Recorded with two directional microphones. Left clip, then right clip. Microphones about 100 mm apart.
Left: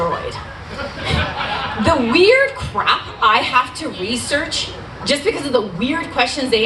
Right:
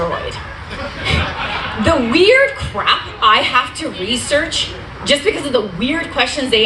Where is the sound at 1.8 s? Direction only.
55° left (ahead or behind).